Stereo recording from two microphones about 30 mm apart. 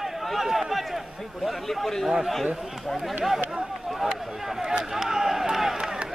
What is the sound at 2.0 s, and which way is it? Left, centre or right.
Speech, centre.